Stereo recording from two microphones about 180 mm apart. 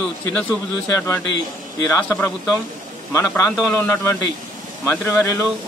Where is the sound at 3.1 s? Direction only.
15° left (ahead or behind).